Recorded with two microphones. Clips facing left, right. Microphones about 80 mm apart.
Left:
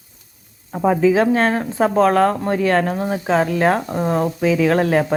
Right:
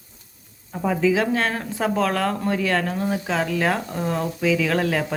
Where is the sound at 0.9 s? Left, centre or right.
Left.